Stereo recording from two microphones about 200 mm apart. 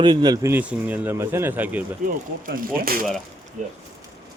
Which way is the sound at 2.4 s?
45° right (ahead or behind).